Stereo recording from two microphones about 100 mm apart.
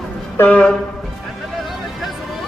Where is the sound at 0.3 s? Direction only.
15° left (ahead or behind).